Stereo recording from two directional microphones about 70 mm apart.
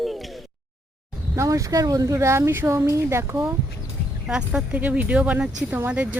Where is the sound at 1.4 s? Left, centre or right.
Right.